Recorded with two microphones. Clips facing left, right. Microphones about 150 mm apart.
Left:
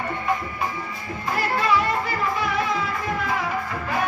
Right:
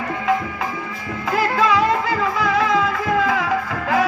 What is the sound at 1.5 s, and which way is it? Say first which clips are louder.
Music: right 4 dB; 90° right.